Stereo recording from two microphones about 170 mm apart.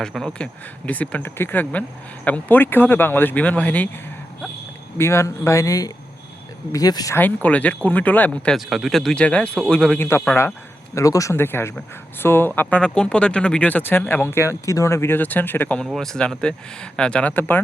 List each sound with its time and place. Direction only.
0.0 s speech: centre (ahead or behind)
4.9 s speech: 15° left (ahead or behind)